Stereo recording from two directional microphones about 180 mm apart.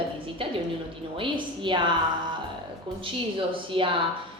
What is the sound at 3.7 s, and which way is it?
Speech, 30° right (ahead or behind).